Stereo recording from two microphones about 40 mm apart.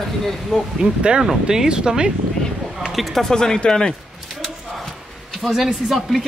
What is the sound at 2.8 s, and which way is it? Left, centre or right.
Speech, centre.